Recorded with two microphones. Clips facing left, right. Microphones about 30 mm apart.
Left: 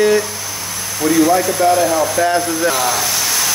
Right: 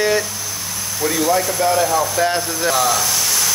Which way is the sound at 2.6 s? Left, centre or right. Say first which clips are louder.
Left 1 dB; centre.